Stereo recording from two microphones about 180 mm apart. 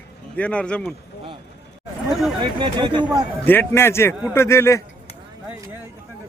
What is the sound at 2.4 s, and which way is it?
Speech, 25° right (ahead or behind).